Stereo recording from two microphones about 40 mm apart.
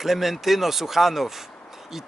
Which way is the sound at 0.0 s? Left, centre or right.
Centre.